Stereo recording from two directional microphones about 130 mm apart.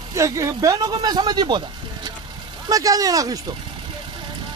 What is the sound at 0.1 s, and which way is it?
Speech, 25° right (ahead or behind).